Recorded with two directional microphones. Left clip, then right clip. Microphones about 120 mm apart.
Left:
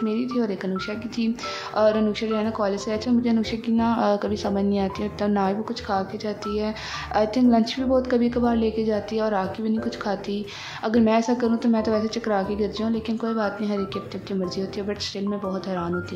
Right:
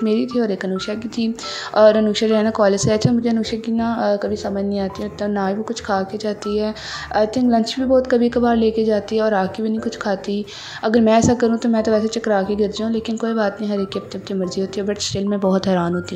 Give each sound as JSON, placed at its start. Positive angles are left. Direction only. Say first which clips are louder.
{"t": 0.0, "sound": "a woman's voice", "louder": "right 6 dB", "side_deg": -40}
{"t": 1.8, "sound": "a woman's voice", "louder": "right 8 dB", "side_deg": -40}
{"t": 2.2, "sound": "speech", "louder": "right 9 dB", "side_deg": -55}
{"t": 3.3, "sound": "a woman's voice", "louder": "right 4 dB", "side_deg": -25}
{"t": 5.9, "sound": "a woman's voice", "louder": "right 5 dB", "side_deg": -30}
{"t": 15.3, "sound": "speech", "louder": "right 14 dB", "side_deg": -70}